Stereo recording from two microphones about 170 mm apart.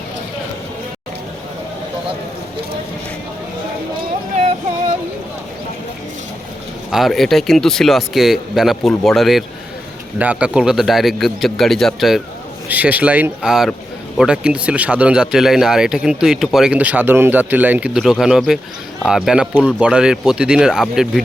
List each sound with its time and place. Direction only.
6.9 s speech: centre (ahead or behind)